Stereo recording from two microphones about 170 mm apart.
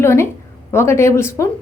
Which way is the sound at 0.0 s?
15° left (ahead or behind).